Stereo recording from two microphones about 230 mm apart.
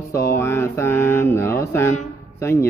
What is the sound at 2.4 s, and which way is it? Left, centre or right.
Speech, centre.